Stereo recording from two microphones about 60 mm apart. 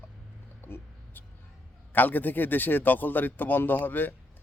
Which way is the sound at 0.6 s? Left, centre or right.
Left.